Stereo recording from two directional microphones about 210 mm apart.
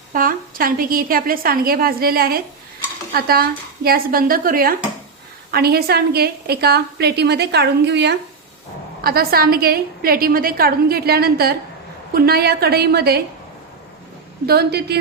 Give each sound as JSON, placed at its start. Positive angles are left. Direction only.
{"t": 0.1, "sound": "a woman's voice", "side_deg": -40}
{"t": 14.4, "sound": "a woman's voice", "side_deg": -50}